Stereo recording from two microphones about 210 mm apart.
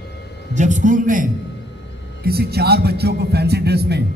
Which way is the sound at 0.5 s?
35° right (ahead or behind).